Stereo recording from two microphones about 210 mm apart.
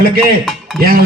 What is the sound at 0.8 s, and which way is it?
Speech, 45° right (ahead or behind).